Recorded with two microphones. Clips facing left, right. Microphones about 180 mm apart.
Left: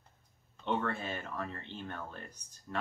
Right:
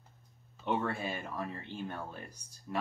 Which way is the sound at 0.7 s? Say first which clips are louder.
Right 1 dB; 10° right (ahead or behind).